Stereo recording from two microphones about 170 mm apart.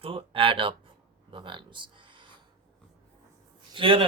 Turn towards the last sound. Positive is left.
turn(degrees=-30)  # may be behind; listen again after turning